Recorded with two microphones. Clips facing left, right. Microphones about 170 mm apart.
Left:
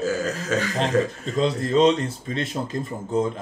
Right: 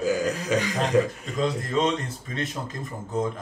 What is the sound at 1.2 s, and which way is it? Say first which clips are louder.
Speech: left 4 dB; 25° left (ahead or behind).